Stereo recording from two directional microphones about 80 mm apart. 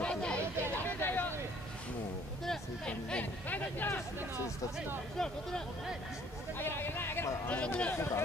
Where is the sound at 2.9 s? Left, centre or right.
Centre.